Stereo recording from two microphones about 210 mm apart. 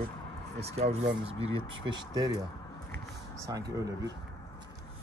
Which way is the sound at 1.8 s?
20° right (ahead or behind).